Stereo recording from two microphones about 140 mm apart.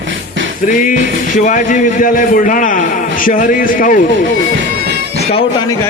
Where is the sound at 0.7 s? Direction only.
70° left (ahead or behind).